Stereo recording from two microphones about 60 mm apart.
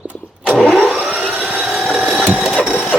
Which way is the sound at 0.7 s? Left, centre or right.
Centre.